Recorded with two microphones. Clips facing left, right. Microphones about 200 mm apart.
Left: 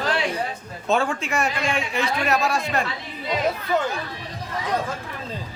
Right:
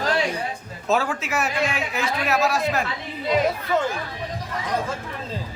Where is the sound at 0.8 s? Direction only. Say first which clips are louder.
Left 1 dB; 5° right (ahead or behind).